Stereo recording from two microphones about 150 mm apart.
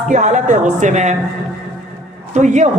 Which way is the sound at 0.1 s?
55° right (ahead or behind).